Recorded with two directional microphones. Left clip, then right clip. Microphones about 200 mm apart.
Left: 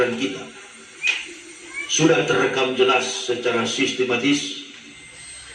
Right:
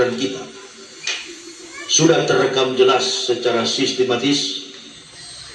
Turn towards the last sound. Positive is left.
turn(degrees=-30)  # may be behind; listen again after turning